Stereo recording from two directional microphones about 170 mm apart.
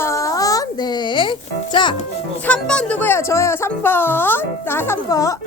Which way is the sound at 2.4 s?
5° left (ahead or behind).